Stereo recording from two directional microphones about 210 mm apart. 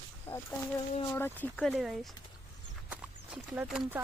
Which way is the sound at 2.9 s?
5° right (ahead or behind).